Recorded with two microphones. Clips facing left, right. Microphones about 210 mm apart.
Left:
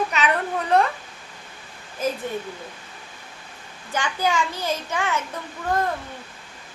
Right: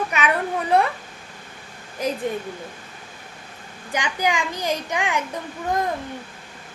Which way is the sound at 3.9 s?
15° right (ahead or behind).